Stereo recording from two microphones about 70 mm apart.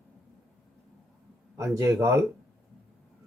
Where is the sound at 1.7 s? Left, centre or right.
Right.